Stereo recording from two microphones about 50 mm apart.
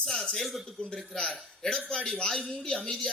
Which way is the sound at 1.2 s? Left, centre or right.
Centre.